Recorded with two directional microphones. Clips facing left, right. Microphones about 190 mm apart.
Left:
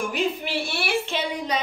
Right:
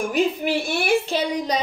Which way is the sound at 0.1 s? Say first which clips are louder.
Right 5 dB; 45° right (ahead or behind).